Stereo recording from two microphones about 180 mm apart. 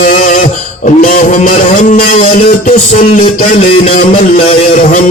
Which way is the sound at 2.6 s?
50° left (ahead or behind).